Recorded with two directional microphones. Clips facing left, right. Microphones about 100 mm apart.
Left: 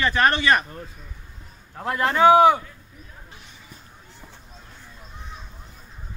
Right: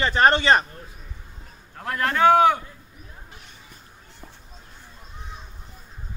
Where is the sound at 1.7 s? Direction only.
15° left (ahead or behind).